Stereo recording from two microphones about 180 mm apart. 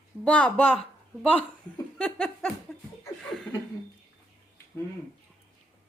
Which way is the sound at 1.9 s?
5° left (ahead or behind).